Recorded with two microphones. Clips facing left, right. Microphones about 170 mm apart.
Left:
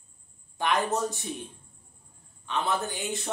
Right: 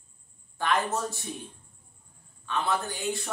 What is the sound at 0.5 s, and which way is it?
Speech, 20° left (ahead or behind).